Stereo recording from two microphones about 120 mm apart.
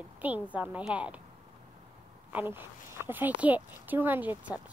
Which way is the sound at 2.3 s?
15° right (ahead or behind).